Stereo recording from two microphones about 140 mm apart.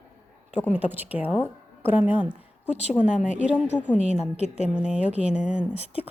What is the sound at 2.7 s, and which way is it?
A woman's voice, 50° left (ahead or behind).